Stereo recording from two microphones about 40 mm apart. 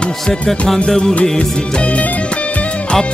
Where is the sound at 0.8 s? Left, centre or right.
Centre.